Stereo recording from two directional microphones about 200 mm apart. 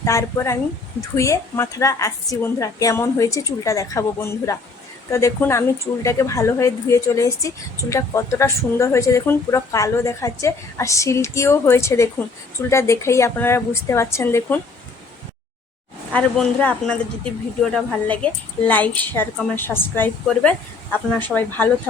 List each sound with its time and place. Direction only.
0.0 s a woman's voice: 15° left (ahead or behind)
16.1 s a woman's voice: 5° left (ahead or behind)